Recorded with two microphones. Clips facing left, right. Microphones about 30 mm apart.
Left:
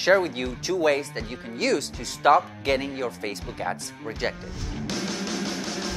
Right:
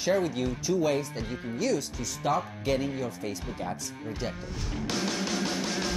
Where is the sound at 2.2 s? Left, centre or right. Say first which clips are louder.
Left 9 dB; left.